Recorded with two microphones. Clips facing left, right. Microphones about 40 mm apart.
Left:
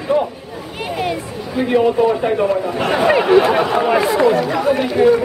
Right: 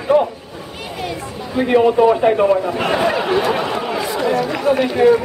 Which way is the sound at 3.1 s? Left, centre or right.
Centre.